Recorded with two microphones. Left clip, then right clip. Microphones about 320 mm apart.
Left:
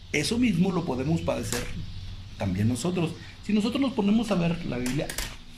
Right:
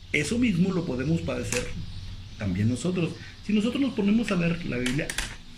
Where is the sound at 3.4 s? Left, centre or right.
Centre.